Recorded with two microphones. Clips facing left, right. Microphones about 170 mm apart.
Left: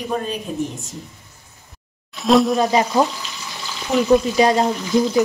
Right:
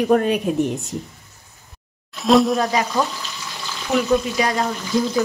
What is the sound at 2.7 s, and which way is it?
Speech, 25° left (ahead or behind).